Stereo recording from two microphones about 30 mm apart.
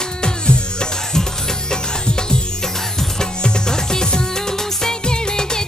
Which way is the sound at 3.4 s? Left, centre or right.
Left.